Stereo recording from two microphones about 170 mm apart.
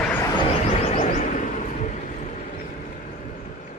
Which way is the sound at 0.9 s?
45° left (ahead or behind).